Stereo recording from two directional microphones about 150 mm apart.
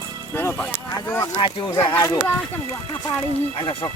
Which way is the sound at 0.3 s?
10° left (ahead or behind).